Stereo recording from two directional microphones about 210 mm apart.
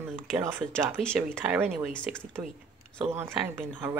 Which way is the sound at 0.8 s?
Centre (ahead or behind).